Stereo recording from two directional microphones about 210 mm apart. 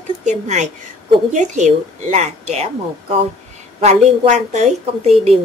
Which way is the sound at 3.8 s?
35° right (ahead or behind).